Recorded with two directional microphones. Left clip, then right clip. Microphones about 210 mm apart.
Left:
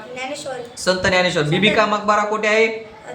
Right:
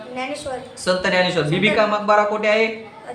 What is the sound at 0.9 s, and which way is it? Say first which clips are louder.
Speech: left 1 dB; 15° left (ahead or behind).